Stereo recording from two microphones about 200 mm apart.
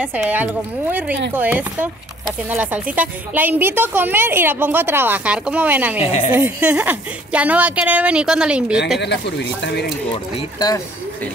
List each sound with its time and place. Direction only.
0.0 s a woman's voice: 5° right (ahead or behind)
9.0 s speech: 60° left (ahead or behind)
10.1 s speech: 20° left (ahead or behind)